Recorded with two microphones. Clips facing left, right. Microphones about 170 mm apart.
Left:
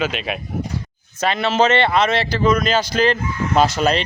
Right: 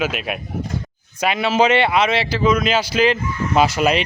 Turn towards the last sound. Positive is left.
turn(degrees=-5)  # may be behind; listen again after turning